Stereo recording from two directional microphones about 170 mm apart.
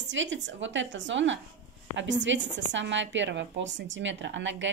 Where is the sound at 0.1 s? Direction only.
90° right.